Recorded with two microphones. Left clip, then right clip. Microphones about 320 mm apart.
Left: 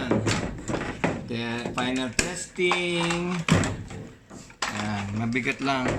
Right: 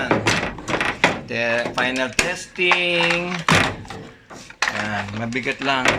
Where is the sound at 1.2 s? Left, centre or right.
Centre.